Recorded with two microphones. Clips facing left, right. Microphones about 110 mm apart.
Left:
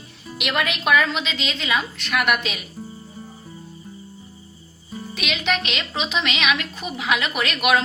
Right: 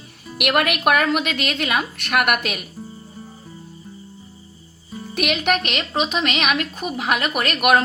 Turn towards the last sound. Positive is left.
turn(degrees=-45)  # may be behind; listen again after turning